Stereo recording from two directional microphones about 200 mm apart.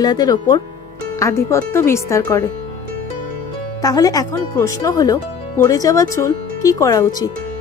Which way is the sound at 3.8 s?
20° left (ahead or behind).